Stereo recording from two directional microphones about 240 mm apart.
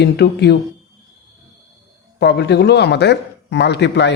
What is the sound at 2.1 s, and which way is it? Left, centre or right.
Speech, left.